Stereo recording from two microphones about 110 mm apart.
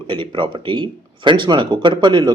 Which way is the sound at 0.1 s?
50° right (ahead or behind).